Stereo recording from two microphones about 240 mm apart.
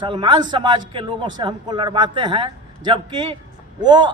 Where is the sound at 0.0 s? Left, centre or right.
Centre.